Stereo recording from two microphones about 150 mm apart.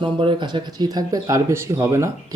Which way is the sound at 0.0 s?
35° right (ahead or behind).